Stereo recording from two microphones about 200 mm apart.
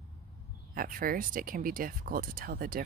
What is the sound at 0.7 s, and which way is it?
Speech, 45° right (ahead or behind).